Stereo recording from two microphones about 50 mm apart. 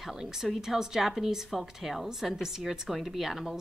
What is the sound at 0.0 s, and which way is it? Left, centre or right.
A woman's voice, centre.